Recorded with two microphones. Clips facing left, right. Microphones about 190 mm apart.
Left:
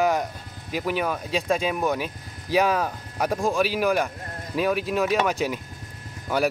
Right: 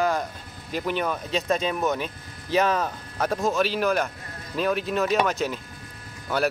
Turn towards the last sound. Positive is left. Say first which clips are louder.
# left 1 dB
turn(degrees=10)  # may be behind; listen again after turning